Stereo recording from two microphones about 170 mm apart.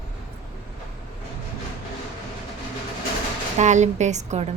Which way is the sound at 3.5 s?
45° right (ahead or behind).